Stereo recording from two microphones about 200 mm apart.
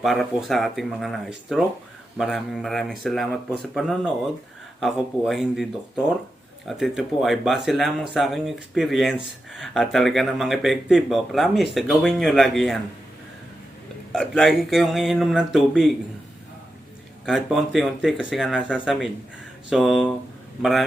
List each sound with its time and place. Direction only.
0.0 s speech: centre (ahead or behind)
6.7 s speech: centre (ahead or behind)
14.1 s speech: centre (ahead or behind)
17.2 s speech: centre (ahead or behind)